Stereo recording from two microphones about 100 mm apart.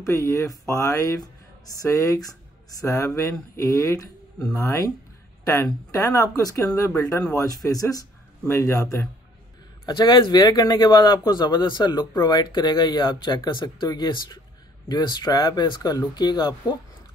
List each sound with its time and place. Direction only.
0.0 s speech: 30° left (ahead or behind)
9.8 s speech: 45° left (ahead or behind)